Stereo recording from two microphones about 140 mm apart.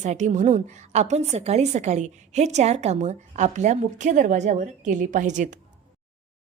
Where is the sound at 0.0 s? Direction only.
60° right (ahead or behind).